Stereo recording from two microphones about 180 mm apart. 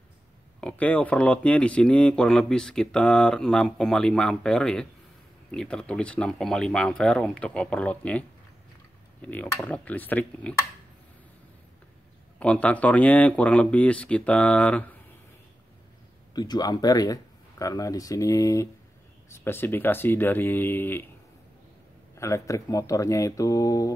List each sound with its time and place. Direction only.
0.6 s speech: 5° left (ahead or behind)
12.4 s speech: 5° left (ahead or behind)
16.3 s speech: 20° left (ahead or behind)
22.1 s speech: 15° left (ahead or behind)